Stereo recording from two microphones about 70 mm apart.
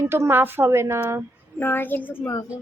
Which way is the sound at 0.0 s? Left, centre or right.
Right.